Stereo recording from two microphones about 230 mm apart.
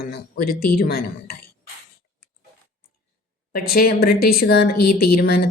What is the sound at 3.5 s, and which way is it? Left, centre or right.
Speech, left.